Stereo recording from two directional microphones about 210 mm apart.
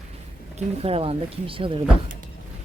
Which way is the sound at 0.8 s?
25° right (ahead or behind).